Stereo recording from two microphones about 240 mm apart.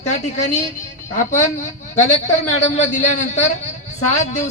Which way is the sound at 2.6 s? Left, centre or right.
Left.